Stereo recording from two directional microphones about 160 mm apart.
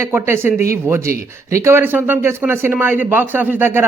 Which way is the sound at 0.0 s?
15° right (ahead or behind).